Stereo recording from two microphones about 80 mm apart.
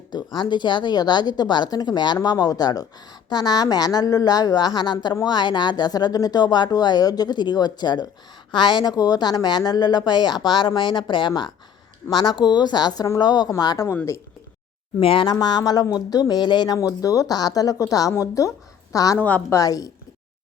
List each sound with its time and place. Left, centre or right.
0.1 s a woman's voice: left
13.6 s speech: left
13.9 s a woman's voice: left
15.1 s a woman's voice: left
16.4 s speech: left
16.7 s a woman's voice: left